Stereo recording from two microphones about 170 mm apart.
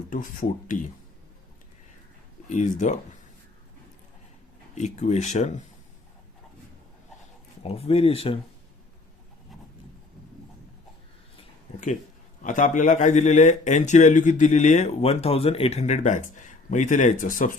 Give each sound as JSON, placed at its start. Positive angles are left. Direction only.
{"t": 0.1, "sound": "speech", "side_deg": 50}
{"t": 2.5, "sound": "speech", "side_deg": 45}
{"t": 4.7, "sound": "speech", "side_deg": 40}
{"t": 7.6, "sound": "speech", "side_deg": 35}
{"t": 12.4, "sound": "speech", "side_deg": 50}